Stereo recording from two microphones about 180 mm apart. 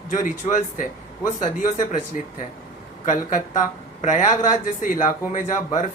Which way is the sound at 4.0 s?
45° left (ahead or behind).